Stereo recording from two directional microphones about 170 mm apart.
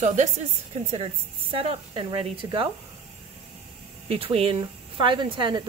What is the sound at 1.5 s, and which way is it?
Speech, 35° right (ahead or behind).